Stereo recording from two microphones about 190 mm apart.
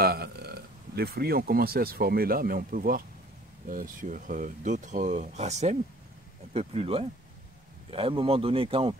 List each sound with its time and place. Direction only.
0.0 s speech: 55° right (ahead or behind); by 8.9 s 30° right (ahead or behind)